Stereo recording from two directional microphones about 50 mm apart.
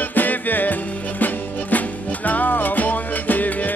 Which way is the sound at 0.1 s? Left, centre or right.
Left.